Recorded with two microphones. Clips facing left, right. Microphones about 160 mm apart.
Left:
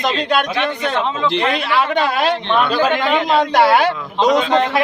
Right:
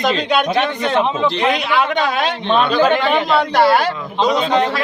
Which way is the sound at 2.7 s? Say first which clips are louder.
Right 2 dB; 10° left (ahead or behind).